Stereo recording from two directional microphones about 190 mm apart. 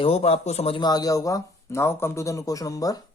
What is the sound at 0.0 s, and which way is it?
Speech, 35° left (ahead or behind).